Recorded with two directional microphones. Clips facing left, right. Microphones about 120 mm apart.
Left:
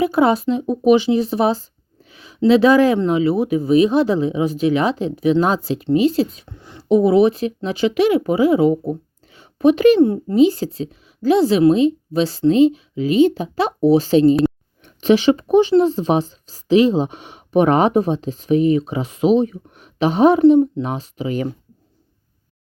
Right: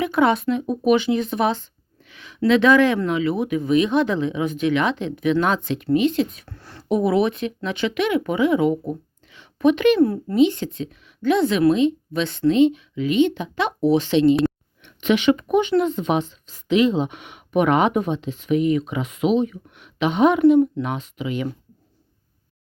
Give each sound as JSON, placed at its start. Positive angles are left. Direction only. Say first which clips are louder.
{"t": 0.0, "sound": "speech", "louder": "left 3 dB", "side_deg": 35}
{"t": 6.5, "sound": "speech", "louder": "left 2 dB", "side_deg": 15}
{"t": 6.8, "sound": "speech", "louder": "left 6 dB", "side_deg": 30}
{"t": 10.0, "sound": "a child's voice", "louder": "left 3 dB", "side_deg": 25}
{"t": 10.3, "sound": "speech", "louder": "left 4 dB", "side_deg": 35}